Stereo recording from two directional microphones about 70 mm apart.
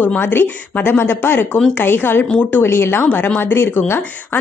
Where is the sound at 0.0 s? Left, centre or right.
Left.